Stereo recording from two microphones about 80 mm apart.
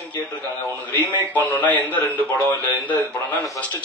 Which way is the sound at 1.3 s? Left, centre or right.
Left.